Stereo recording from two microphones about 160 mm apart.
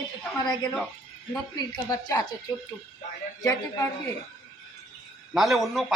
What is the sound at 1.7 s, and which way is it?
Speech, 25° left (ahead or behind).